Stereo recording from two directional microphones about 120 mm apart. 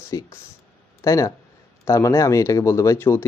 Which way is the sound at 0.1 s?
30° left (ahead or behind).